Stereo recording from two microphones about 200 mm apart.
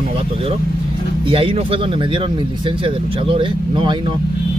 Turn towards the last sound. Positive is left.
turn(degrees=-25)  # may be behind; listen again after turning